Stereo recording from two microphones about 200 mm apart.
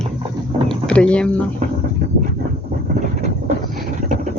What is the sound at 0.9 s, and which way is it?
Speech, 5° left (ahead or behind).